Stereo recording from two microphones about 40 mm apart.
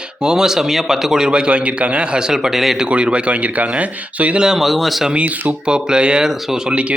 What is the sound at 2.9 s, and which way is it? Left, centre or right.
Speech, right.